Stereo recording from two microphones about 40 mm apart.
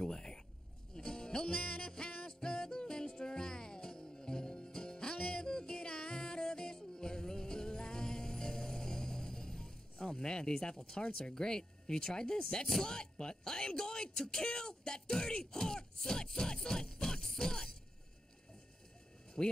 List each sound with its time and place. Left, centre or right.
0.0 s a sound: centre
0.9 s music: centre
11.1 s speech: left
19.4 s speech: centre